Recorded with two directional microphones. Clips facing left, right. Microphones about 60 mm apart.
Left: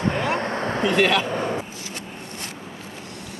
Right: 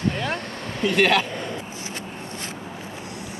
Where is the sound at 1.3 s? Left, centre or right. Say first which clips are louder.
Left 6 dB; left.